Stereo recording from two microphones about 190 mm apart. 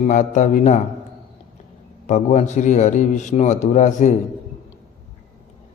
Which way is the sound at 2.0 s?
40° left (ahead or behind).